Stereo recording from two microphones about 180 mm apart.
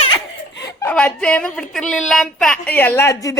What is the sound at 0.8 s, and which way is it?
A woman's voice, 10° left (ahead or behind).